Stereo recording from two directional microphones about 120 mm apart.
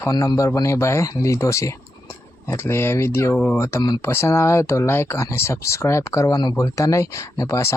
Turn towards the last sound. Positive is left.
turn(degrees=25)  # may be behind; listen again after turning